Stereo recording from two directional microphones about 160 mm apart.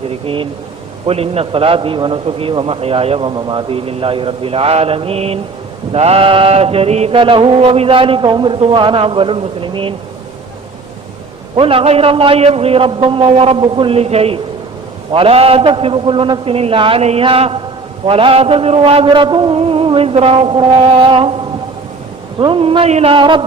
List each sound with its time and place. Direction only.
0.1 s a man's voice: 35° right (ahead or behind)
11.5 s a man's voice: 35° right (ahead or behind)
22.4 s a man's voice: 35° right (ahead or behind)